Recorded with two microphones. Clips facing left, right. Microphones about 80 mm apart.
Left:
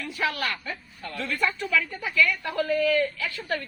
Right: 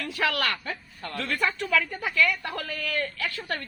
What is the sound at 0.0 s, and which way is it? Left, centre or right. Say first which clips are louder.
Speech: right 1 dB; right.